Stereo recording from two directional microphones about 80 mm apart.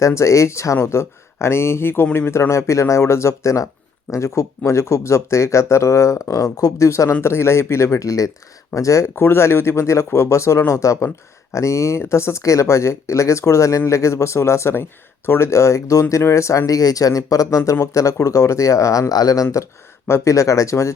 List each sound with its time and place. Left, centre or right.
0.0 s speech: left